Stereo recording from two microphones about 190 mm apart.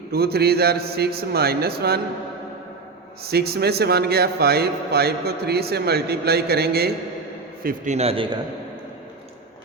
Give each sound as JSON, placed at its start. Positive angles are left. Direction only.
{"t": 0.1, "sound": "a man's voice", "side_deg": -55}
{"t": 3.2, "sound": "a man's voice", "side_deg": -55}
{"t": 7.9, "sound": "a man's voice", "side_deg": -30}